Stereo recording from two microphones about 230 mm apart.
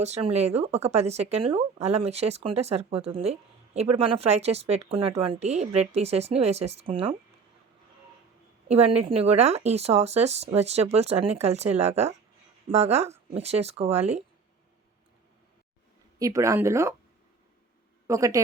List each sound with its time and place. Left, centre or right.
0.0 s speech: right
8.6 s speech: right
16.1 s speech: centre
18.1 s speech: centre